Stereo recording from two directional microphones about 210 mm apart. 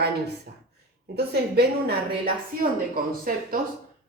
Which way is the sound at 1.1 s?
50° right (ahead or behind).